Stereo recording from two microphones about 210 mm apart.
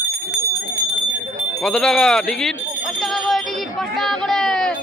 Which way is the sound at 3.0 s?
Centre (ahead or behind).